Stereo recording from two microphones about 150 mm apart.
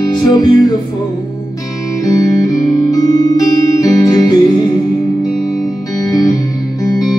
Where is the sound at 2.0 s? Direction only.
25° left (ahead or behind).